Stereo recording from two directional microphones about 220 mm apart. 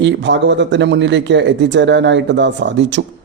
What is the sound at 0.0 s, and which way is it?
Speech, 55° right (ahead or behind).